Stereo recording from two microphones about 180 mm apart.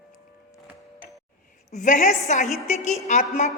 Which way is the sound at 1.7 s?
45° left (ahead or behind).